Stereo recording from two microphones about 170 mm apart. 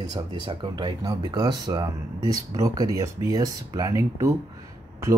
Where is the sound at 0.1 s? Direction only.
25° right (ahead or behind).